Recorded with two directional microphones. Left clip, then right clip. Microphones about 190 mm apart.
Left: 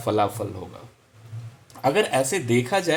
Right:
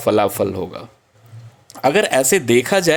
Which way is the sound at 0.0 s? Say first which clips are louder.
Right 7 dB; 35° right (ahead or behind).